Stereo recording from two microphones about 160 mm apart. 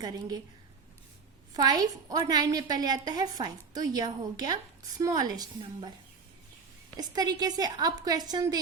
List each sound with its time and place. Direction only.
0.0 s a woman's voice: 25° right (ahead or behind)
1.5 s a woman's voice: 25° right (ahead or behind)
6.9 s a woman's voice: 25° right (ahead or behind)